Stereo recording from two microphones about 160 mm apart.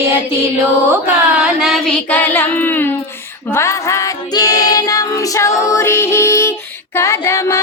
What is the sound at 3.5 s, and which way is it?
Music, 15° left (ahead or behind).